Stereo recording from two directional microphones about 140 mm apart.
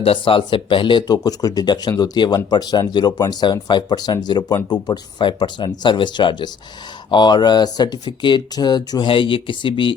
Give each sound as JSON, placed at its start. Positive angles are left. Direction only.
{"t": 0.0, "sound": "speech", "side_deg": 40}